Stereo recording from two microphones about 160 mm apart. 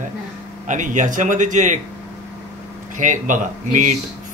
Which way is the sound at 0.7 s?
50° right (ahead or behind).